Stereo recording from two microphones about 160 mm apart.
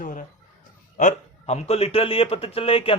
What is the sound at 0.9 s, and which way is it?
A man's voice, 45° left (ahead or behind).